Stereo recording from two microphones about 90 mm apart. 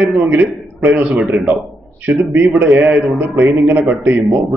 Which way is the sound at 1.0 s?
5° right (ahead or behind).